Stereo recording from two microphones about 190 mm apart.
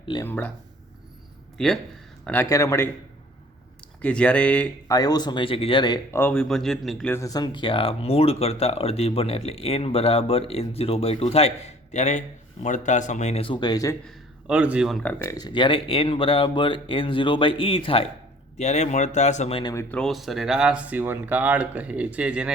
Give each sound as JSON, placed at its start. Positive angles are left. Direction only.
{"t": 0.1, "sound": "speech", "side_deg": 15}
{"t": 1.5, "sound": "speech", "side_deg": 0}
{"t": 4.0, "sound": "speech", "side_deg": 5}
{"t": 4.9, "sound": "speech", "side_deg": 20}
{"t": 6.1, "sound": "speech", "side_deg": 5}
{"t": 14.1, "sound": "speech", "side_deg": -5}
{"t": 15.0, "sound": "speech", "side_deg": 15}
{"t": 19.7, "sound": "speech", "side_deg": 5}